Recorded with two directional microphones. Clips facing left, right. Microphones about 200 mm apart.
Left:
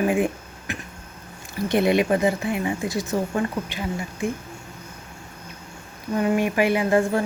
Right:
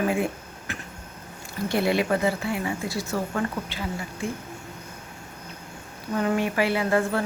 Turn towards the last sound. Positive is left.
turn(degrees=15)  # may be behind; listen again after turning